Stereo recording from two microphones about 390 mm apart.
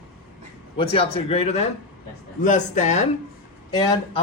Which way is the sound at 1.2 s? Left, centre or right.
Centre.